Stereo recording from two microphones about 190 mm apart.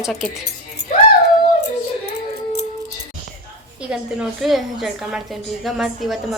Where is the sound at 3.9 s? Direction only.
5° right (ahead or behind).